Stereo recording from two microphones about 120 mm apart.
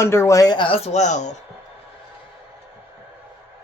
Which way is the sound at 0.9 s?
80° left.